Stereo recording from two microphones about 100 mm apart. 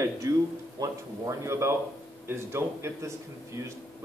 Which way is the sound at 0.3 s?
35° right (ahead or behind).